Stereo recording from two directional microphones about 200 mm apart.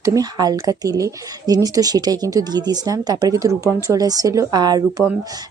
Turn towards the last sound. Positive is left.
turn(degrees=-20)  # may be behind; listen again after turning